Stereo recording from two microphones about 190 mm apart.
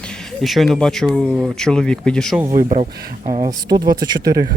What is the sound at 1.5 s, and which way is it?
Speech, 5° left (ahead or behind).